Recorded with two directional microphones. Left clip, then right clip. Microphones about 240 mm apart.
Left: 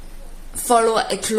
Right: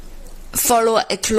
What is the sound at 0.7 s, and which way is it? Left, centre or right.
Speech, right.